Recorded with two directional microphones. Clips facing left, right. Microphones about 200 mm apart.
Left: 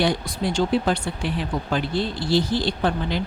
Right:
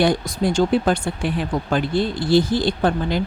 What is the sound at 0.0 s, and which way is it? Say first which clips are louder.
Speech: right 4 dB; 45° right (ahead or behind).